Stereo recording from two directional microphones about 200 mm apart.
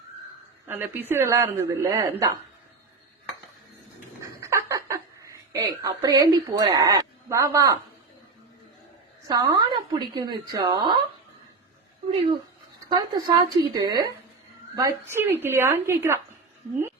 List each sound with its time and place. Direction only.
0.7 s a woman's voice: 10° right (ahead or behind)
4.2 s a sound: 15° right (ahead or behind)
9.2 s a woman's voice: 20° right (ahead or behind)
12.9 s a woman's voice: 20° right (ahead or behind)